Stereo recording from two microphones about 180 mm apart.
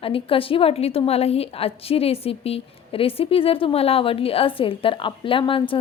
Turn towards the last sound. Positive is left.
turn(degrees=30)  # may be behind; listen again after turning